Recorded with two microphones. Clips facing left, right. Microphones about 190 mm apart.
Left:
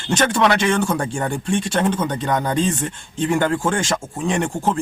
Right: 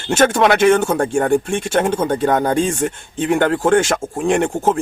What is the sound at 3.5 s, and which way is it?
Speech, 40° right (ahead or behind).